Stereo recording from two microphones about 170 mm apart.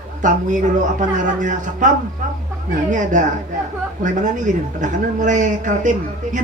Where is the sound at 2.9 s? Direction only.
50° right (ahead or behind).